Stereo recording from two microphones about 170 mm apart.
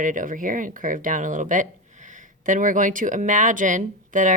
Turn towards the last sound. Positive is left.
turn(degrees=-50)  # may be behind; listen again after turning